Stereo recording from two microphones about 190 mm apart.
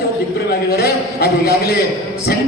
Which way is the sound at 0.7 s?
55° left (ahead or behind).